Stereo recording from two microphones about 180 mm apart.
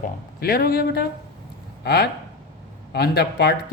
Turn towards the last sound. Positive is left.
turn(degrees=60)  # may be behind; listen again after turning